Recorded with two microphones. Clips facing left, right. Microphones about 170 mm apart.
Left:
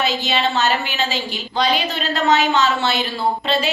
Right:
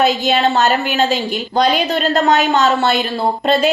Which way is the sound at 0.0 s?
50° right (ahead or behind).